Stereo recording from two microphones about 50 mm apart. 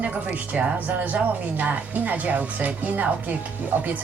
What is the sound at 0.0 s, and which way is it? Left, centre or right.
Speech, right.